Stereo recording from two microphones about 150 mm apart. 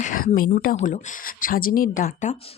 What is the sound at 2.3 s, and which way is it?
Speech, 40° left (ahead or behind).